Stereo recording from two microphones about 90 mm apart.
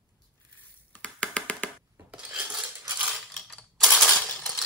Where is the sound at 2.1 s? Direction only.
10° right (ahead or behind).